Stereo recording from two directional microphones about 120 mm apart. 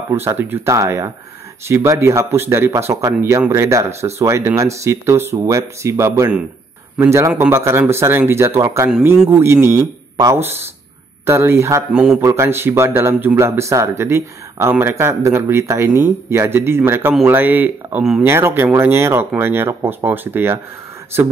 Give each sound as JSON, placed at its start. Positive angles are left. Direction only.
{"t": 0.1, "sound": "speech", "side_deg": -20}
{"t": 11.9, "sound": "speech", "side_deg": -5}
{"t": 12.2, "sound": "speech", "side_deg": -25}